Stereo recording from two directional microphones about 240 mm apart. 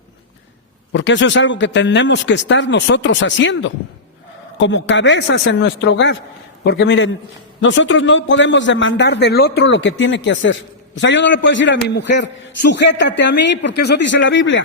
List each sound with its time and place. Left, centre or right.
0.9 s a man's voice: left